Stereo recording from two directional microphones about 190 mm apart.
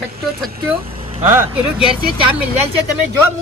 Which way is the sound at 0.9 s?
30° right (ahead or behind).